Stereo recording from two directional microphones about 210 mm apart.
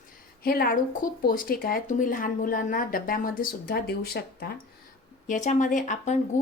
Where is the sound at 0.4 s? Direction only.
45° left (ahead or behind).